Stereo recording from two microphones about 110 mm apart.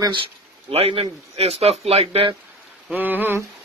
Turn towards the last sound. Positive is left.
turn(degrees=-20)  # may be behind; listen again after turning